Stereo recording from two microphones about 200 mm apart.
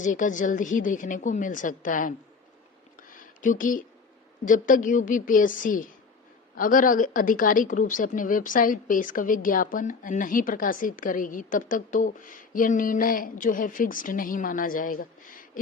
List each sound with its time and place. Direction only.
0.0 s a woman's voice: 40° left (ahead or behind)
3.1 s a sound: 40° left (ahead or behind)
4.4 s a woman's voice: 40° left (ahead or behind)